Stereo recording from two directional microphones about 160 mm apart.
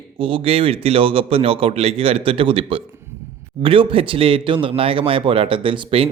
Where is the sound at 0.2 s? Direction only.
35° right (ahead or behind).